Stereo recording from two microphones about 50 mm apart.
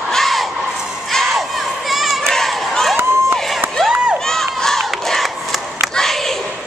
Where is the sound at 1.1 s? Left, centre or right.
Centre.